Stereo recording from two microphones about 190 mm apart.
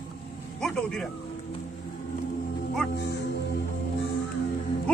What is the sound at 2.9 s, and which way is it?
Music, 60° left (ahead or behind).